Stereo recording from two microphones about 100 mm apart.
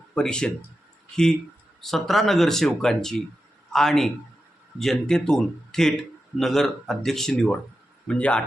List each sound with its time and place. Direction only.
0.1 s a man's voice: 10° left (ahead or behind)